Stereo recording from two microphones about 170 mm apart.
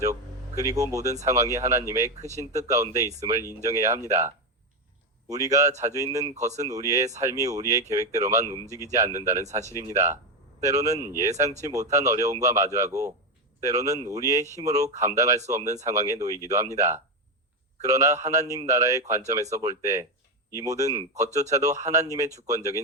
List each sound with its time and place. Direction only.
0.0 s speech: 20° right (ahead or behind)
2.1 s speech: 40° right (ahead or behind)
2.6 s speech: 20° right (ahead or behind)
5.3 s speech: 20° right (ahead or behind)
6.3 s speech: 40° right (ahead or behind)
6.6 s speech: 20° right (ahead or behind)
9.4 s speech: 45° right (ahead or behind)
9.7 s speech: 15° right (ahead or behind)